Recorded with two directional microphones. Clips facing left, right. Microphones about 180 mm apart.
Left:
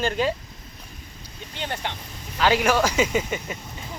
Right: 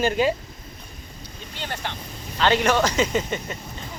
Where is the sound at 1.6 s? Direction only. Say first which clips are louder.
Left 1 dB; 15° left (ahead or behind).